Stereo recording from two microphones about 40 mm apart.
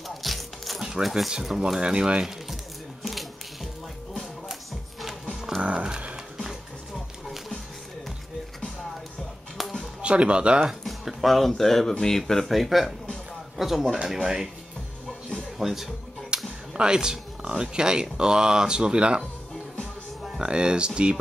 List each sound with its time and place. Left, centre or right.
0.1 s music: centre
1.0 s speech: centre
1.8 s speech: right
3.0 s a sound: centre
5.6 s speech: right
5.9 s music: right
9.6 s music: centre
10.0 s speech: right
10.8 s a man's voice: centre
15.6 s speech: centre
16.3 s a sound: right
16.7 s speech: centre
20.3 s speech: right